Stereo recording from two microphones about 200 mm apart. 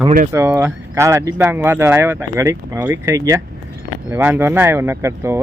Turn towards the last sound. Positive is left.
turn(degrees=-15)  # may be behind; listen again after turning